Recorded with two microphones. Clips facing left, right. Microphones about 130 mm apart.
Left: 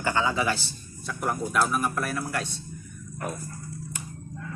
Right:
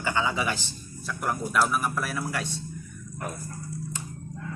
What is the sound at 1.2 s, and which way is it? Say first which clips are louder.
Speech: even; centre (ahead or behind).